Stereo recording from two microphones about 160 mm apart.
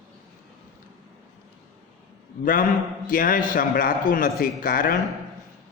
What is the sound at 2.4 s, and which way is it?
A man's voice, 60° left (ahead or behind).